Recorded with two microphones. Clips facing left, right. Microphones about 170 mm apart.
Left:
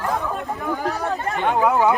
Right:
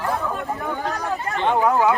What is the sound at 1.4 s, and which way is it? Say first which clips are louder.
Speech: even; 10° left (ahead or behind).